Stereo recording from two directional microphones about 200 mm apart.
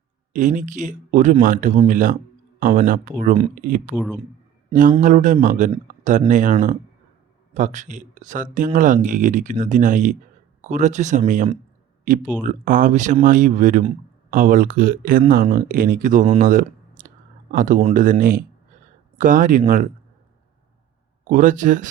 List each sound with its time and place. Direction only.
0.3 s speech: 40° right (ahead or behind)
3.9 s speech: centre (ahead or behind)
4.7 s speech: 40° right (ahead or behind)
12.5 s speech: 40° right (ahead or behind)
16.4 s a sound: 45° right (ahead or behind)
17.5 s speech: 45° right (ahead or behind)
21.2 s speech: 40° right (ahead or behind)